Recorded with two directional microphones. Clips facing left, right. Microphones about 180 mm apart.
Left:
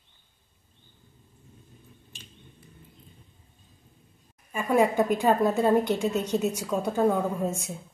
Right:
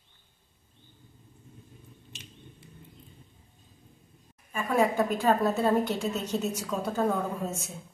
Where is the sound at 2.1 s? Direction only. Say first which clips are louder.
Right 5 dB; 80° right.